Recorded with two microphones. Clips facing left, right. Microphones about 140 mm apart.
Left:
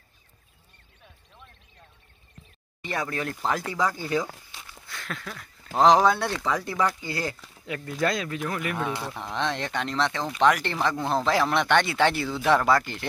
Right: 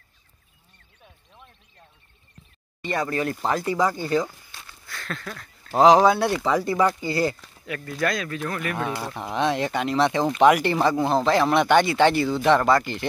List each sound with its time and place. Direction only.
2.8 s speech: 5° left (ahead or behind)
4.0 s speech: 5° left (ahead or behind)
4.5 s a sound: 15° left (ahead or behind)
5.2 s speech: centre (ahead or behind)
7.6 s speech: 20° left (ahead or behind)
8.7 s speech: centre (ahead or behind)